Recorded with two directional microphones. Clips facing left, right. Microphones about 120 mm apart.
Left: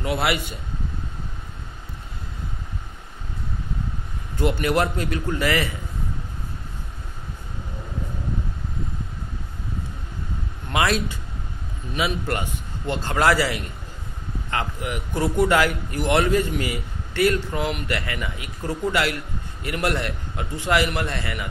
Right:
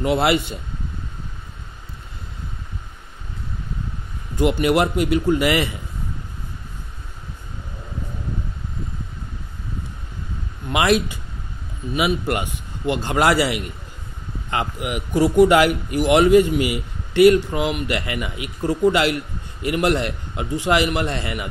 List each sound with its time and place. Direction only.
0.0 s a man's voice: 25° right (ahead or behind)
4.4 s speech: 15° right (ahead or behind)
10.7 s a man's voice: 15° right (ahead or behind)